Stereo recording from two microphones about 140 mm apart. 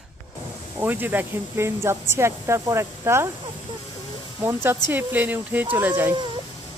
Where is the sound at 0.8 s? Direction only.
15° right (ahead or behind).